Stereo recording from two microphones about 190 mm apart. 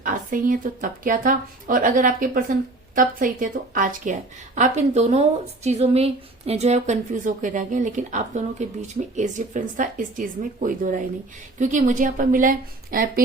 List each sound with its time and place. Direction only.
0.0 s speech: 45° right (ahead or behind)